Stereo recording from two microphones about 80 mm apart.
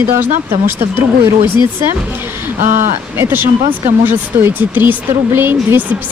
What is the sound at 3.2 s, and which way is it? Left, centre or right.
Speech, right.